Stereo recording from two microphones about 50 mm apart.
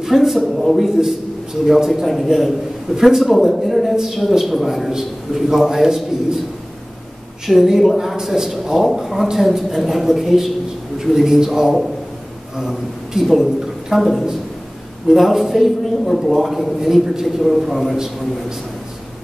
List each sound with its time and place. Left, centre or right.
0.0 s a man's voice: centre
7.4 s a man's voice: centre